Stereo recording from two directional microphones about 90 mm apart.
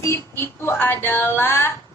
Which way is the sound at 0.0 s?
30° left (ahead or behind).